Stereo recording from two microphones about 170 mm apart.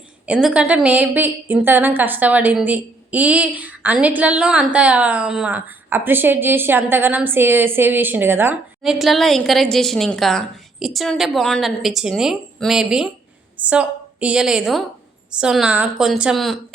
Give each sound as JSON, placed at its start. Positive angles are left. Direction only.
{"t": 0.3, "sound": "a woman's voice", "side_deg": -5}
{"t": 8.8, "sound": "a woman's voice", "side_deg": 0}